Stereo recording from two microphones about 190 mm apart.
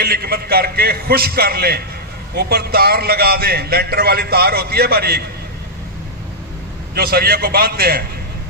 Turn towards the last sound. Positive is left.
turn(degrees=-55)  # may be behind; listen again after turning